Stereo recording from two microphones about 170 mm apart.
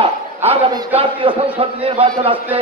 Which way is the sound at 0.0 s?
35° right (ahead or behind).